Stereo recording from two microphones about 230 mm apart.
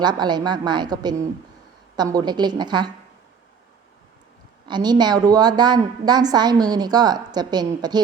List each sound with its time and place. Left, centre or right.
0.0 s a woman's voice: centre
4.6 s a woman's voice: centre